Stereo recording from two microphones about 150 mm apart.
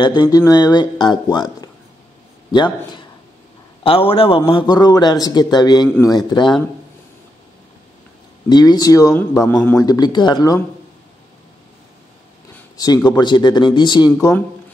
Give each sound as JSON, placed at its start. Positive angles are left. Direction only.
{"t": 0.0, "sound": "a man's voice", "side_deg": 30}
{"t": 8.5, "sound": "a man's voice", "side_deg": 25}
{"t": 9.1, "sound": "a man's voice", "side_deg": 10}
{"t": 9.8, "sound": "a man's voice", "side_deg": 25}
{"t": 12.7, "sound": "a man's voice", "side_deg": 25}